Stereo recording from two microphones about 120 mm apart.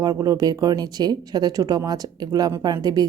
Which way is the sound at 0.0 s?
35° right (ahead or behind).